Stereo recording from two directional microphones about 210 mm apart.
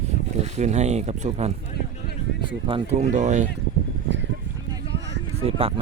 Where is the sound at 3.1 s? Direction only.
35° right (ahead or behind).